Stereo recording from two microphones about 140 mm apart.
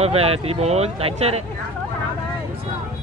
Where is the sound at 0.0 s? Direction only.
45° right (ahead or behind).